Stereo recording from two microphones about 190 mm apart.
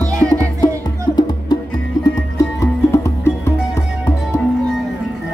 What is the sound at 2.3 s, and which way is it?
Music, 15° left (ahead or behind).